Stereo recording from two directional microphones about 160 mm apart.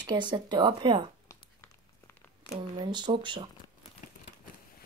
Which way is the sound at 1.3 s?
15° left (ahead or behind).